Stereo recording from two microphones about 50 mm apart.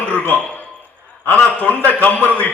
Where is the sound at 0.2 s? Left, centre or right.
Left.